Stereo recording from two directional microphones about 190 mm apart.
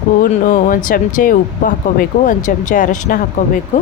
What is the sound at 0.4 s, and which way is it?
A woman's voice, 45° left (ahead or behind).